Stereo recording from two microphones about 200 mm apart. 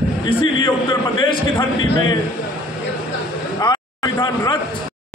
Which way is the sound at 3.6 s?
20° left (ahead or behind).